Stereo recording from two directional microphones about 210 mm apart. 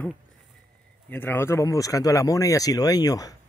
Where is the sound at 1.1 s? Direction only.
10° left (ahead or behind).